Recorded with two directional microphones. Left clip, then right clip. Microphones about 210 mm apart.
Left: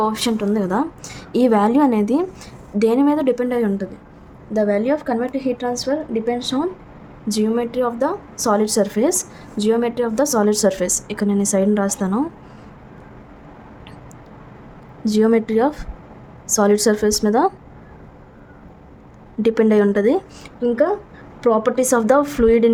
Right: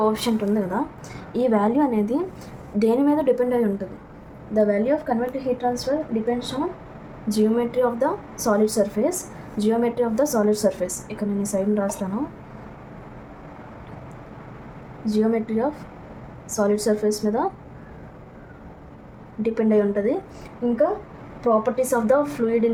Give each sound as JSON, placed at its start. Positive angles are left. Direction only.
{"t": 0.0, "sound": "a woman's voice", "side_deg": 35}
{"t": 15.0, "sound": "a woman's voice", "side_deg": 50}
{"t": 19.4, "sound": "a woman's voice", "side_deg": 45}
{"t": 21.4, "sound": "a woman's voice", "side_deg": 50}